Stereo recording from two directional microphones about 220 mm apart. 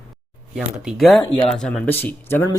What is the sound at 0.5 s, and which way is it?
A man's voice, 5° right (ahead or behind).